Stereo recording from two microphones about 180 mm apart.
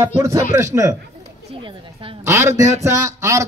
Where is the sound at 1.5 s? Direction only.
30° right (ahead or behind).